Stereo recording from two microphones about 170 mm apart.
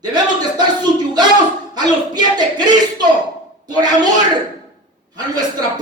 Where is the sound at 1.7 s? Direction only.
25° right (ahead or behind).